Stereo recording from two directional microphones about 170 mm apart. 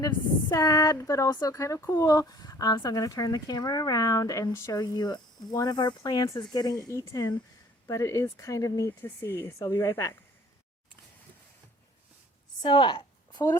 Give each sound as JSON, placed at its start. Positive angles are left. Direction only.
{"t": 0.5, "sound": "speech", "side_deg": 20}
{"t": 12.6, "sound": "a woman's voice", "side_deg": 30}